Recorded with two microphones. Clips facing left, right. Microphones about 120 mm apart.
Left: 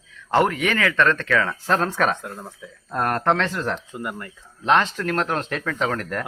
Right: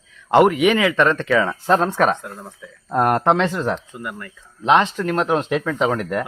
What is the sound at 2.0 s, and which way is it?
Speech, 5° right (ahead or behind).